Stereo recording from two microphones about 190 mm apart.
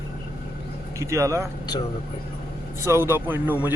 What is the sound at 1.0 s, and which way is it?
Speech, 15° right (ahead or behind).